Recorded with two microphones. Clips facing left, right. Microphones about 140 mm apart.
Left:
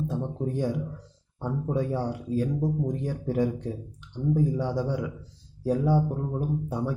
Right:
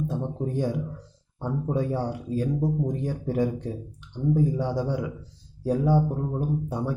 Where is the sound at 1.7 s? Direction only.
Centre (ahead or behind).